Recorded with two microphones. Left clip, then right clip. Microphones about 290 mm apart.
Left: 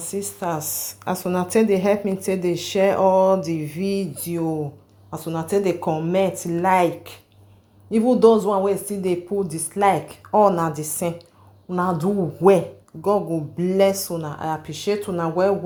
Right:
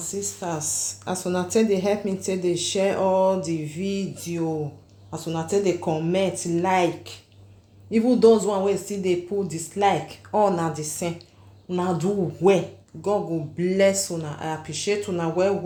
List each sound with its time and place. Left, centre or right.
0.0 s a woman's voice: centre